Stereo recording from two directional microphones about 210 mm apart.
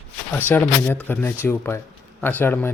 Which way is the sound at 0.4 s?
10° left (ahead or behind).